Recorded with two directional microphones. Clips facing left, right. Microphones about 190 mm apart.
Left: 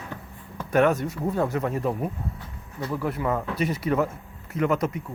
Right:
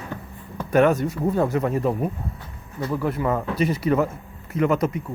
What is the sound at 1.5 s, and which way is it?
Speech, 5° right (ahead or behind).